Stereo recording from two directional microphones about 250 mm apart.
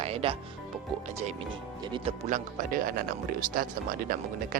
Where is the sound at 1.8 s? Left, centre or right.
Right.